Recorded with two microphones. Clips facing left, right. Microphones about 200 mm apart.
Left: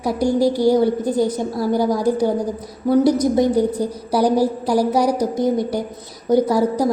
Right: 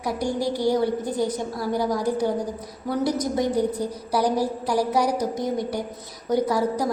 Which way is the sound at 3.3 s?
30° left (ahead or behind).